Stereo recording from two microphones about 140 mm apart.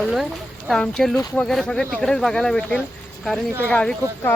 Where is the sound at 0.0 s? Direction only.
Centre (ahead or behind).